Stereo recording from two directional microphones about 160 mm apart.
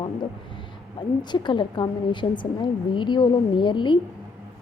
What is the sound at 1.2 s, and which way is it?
A woman's voice, 30° left (ahead or behind).